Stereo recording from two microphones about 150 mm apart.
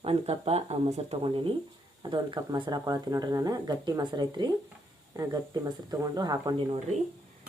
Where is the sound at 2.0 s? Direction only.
30° right (ahead or behind).